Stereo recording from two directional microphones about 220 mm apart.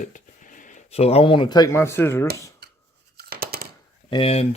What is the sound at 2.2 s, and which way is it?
Speech, 45° right (ahead or behind).